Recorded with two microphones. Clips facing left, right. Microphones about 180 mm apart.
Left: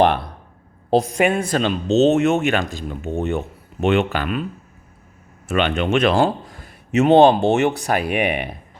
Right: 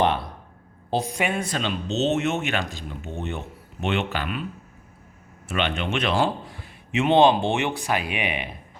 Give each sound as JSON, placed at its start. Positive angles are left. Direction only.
{"t": 1.0, "sound": "speech", "side_deg": 45}
{"t": 5.5, "sound": "a man's voice", "side_deg": 50}